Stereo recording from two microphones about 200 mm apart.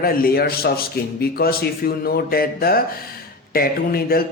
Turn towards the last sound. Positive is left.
turn(degrees=50)  # may be behind; listen again after turning